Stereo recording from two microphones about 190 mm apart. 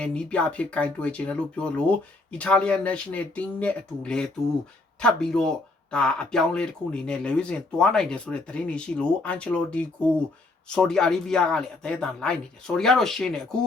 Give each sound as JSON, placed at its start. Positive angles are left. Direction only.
{"t": 0.0, "sound": "speech", "side_deg": 5}